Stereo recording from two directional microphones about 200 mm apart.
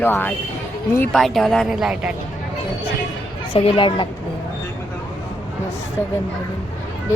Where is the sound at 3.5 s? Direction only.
25° left (ahead or behind).